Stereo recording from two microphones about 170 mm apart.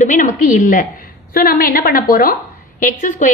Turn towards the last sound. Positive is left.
turn(degrees=50)  # may be behind; listen again after turning